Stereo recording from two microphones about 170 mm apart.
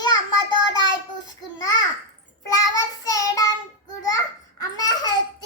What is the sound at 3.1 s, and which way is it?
Child singing, 20° left (ahead or behind).